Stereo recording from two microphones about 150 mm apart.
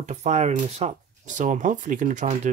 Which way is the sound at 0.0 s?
50° right (ahead or behind).